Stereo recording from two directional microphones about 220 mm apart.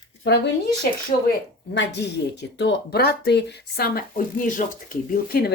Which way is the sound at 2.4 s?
50° left (ahead or behind).